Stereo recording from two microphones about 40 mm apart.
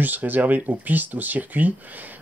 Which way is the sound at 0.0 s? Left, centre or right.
Right.